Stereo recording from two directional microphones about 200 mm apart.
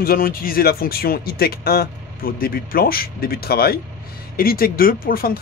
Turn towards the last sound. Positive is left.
turn(degrees=45)  # may be behind; listen again after turning